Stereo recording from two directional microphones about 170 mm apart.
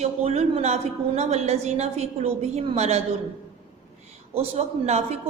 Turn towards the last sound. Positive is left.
turn(degrees=-40)  # may be behind; listen again after turning